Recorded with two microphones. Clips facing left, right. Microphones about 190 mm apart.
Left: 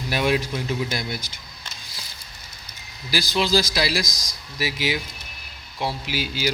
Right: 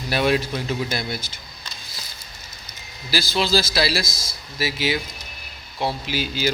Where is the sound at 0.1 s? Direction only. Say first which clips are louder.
Right 2 dB; 15° left (ahead or behind).